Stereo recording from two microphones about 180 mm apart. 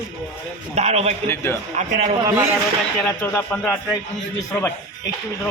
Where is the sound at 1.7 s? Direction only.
40° right (ahead or behind).